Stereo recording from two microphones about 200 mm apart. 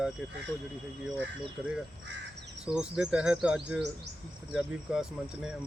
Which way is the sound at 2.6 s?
5° right (ahead or behind).